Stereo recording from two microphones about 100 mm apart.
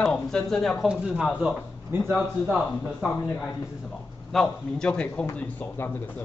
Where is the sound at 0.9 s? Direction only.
10° right (ahead or behind).